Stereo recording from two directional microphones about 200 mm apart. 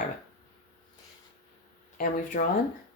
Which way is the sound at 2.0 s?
45° left (ahead or behind).